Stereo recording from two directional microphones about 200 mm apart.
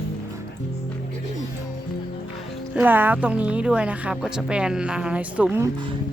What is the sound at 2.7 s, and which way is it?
A woman's voice, 10° right (ahead or behind).